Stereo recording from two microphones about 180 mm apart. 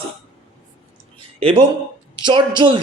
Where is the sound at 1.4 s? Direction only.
30° right (ahead or behind).